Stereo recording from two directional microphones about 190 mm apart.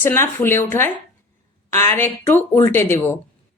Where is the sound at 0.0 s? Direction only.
10° left (ahead or behind).